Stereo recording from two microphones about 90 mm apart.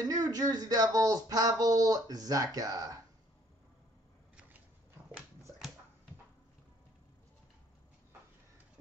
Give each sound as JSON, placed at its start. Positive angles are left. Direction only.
{"t": 0.0, "sound": "speech", "side_deg": -45}